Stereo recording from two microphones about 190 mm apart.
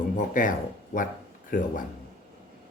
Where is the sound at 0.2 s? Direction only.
45° left (ahead or behind).